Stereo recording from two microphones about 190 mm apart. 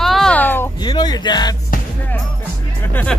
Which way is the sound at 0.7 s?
20° left (ahead or behind).